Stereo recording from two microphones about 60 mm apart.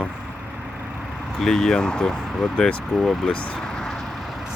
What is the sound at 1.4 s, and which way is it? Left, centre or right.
Speech, centre.